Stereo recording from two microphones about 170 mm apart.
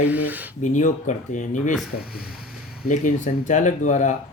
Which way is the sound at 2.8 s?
50° left (ahead or behind).